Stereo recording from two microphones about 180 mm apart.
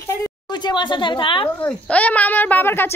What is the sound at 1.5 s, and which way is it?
Speech, 10° left (ahead or behind).